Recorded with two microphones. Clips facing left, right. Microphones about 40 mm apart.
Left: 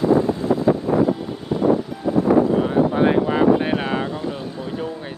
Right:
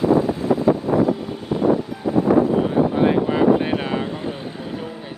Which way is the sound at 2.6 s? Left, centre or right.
Centre.